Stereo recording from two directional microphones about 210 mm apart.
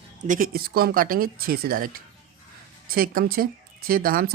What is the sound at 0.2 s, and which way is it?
Speech, 40° right (ahead or behind).